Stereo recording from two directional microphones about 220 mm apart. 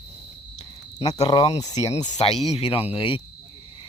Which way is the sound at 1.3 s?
20° left (ahead or behind).